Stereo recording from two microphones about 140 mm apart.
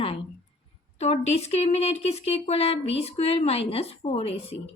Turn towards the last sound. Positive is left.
turn(degrees=45)  # may be behind; listen again after turning